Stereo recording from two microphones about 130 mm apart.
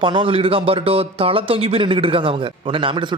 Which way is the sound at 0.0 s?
40° right (ahead or behind).